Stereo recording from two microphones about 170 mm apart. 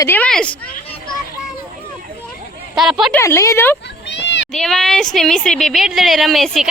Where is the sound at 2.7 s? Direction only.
Centre (ahead or behind).